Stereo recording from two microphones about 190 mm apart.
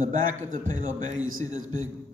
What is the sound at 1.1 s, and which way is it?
Speech, 90° right.